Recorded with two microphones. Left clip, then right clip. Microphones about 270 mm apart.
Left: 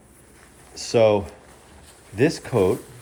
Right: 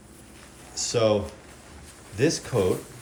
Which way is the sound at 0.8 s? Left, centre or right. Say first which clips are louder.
Left 5 dB; left.